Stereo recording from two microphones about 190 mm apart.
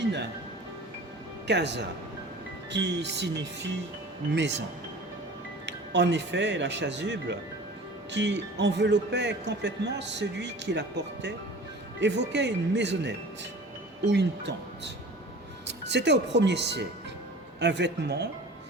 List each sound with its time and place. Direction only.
1.5 s speech: 65° right (ahead or behind)
5.6 s speech: 65° right (ahead or behind)